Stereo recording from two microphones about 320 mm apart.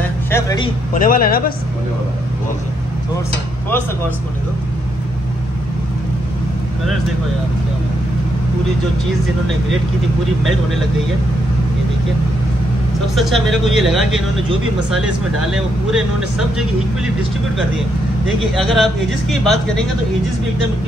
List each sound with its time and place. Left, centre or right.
0.3 s a sound: centre
0.9 s a man's voice: left
13.1 s speech: centre
15.4 s speech: centre
18.5 s speech: centre